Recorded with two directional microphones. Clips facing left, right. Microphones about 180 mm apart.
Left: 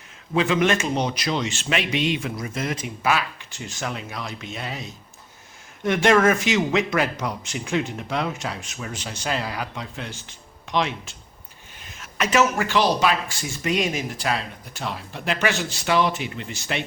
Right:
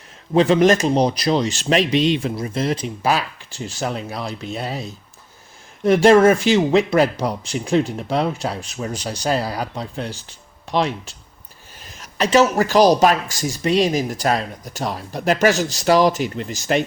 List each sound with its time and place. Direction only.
0.3 s speech: 35° right (ahead or behind)